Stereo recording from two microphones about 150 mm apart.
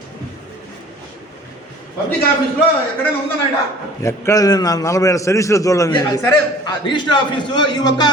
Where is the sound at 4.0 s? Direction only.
20° left (ahead or behind).